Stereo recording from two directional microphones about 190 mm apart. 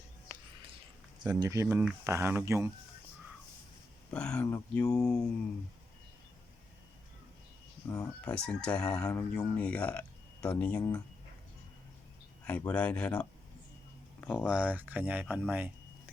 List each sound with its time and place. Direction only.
1.3 s speech: 15° right (ahead or behind)
4.1 s speech: 5° left (ahead or behind)
4.9 s speech: 5° left (ahead or behind)
7.9 s speech: 15° left (ahead or behind)
12.5 s speech: 5° left (ahead or behind)
14.2 s a sound: 10° left (ahead or behind)
14.4 s speech: 5° right (ahead or behind)